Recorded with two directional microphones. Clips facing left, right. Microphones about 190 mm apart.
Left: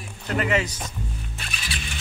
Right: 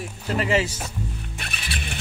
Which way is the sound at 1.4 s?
60° right (ahead or behind).